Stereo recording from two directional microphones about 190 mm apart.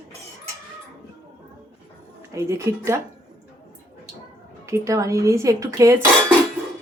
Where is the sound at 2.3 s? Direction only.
15° right (ahead or behind).